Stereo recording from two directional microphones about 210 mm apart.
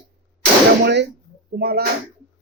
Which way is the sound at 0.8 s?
55° right (ahead or behind).